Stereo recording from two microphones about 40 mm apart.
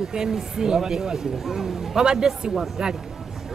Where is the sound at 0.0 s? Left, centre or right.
Centre.